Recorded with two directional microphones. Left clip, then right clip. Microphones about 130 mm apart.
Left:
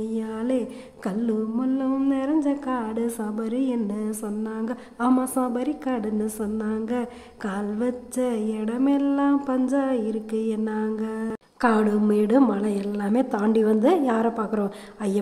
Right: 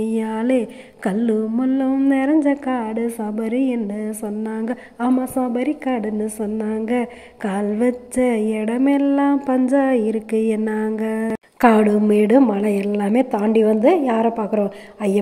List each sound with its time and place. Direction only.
0.0 s a sound: 25° right (ahead or behind)
2.0 s speech: 30° right (ahead or behind)
2.7 s a woman's voice: 10° right (ahead or behind)
4.5 s a woman's voice: 20° right (ahead or behind)
5.2 s a woman's voice: 10° right (ahead or behind)